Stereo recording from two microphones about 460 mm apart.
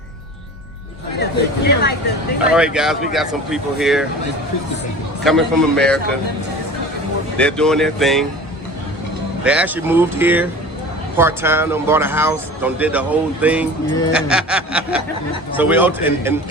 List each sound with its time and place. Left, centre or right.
1.2 s speech: left
2.5 s speech: centre
5.2 s speech: centre
7.3 s speech: centre
9.4 s speech: centre